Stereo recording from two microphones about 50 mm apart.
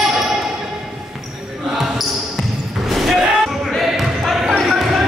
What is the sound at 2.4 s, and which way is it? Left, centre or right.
Basketball bounce, centre.